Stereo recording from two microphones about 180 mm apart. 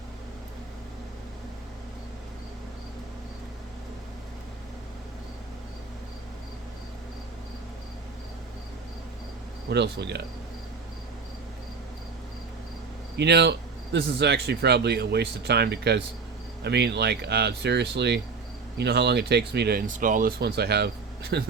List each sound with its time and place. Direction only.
9.6 s speech: 70° right (ahead or behind)
13.1 s speech: 70° right (ahead or behind); by 20.3 s 50° right (ahead or behind)
20.4 s speech: 65° right (ahead or behind)